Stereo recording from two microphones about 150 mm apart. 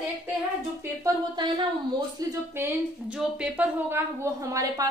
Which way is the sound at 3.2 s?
10° right (ahead or behind).